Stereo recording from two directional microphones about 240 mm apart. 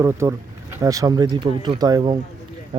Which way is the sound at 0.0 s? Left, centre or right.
Centre.